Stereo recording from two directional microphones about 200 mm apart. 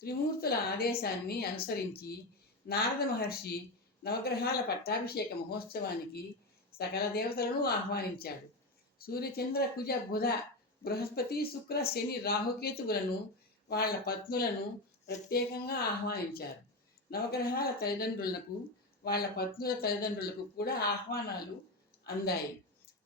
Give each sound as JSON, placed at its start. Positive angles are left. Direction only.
{"t": 0.0, "sound": "speech", "side_deg": 50}